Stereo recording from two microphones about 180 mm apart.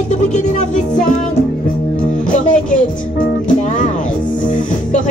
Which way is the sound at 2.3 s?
45° left (ahead or behind).